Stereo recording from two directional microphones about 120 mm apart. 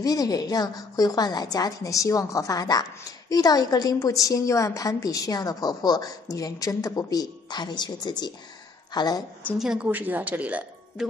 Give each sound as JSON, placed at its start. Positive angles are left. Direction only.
{"t": 0.0, "sound": "a woman's voice", "side_deg": 30}
{"t": 9.6, "sound": "speech", "side_deg": -5}